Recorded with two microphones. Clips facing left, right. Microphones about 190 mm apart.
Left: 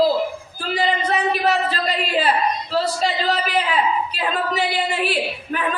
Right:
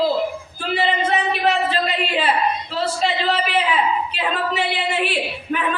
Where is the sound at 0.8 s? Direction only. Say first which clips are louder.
Even; 40° left (ahead or behind).